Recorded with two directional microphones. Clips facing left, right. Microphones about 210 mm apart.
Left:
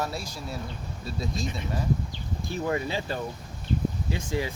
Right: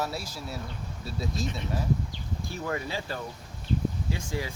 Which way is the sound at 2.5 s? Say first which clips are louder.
Left 5 dB; 20° left (ahead or behind).